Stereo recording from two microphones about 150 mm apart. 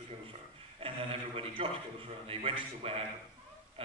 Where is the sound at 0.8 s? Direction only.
40° right (ahead or behind).